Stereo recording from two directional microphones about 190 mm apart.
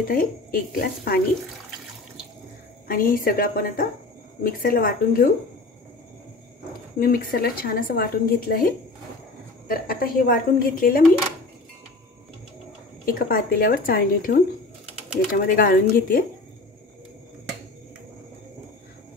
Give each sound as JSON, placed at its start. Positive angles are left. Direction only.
{"t": 0.1, "sound": "a woman's voice", "side_deg": 50}
{"t": 2.9, "sound": "a woman's voice", "side_deg": 45}
{"t": 7.0, "sound": "a woman's voice", "side_deg": 50}
{"t": 9.7, "sound": "a woman's voice", "side_deg": 50}
{"t": 13.0, "sound": "a woman's voice", "side_deg": 50}